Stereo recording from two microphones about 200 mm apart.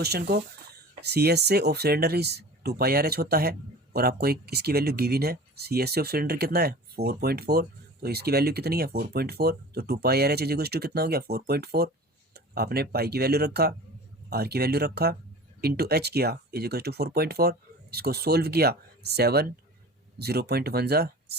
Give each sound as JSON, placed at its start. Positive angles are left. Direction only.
{"t": 0.0, "sound": "speech", "side_deg": -55}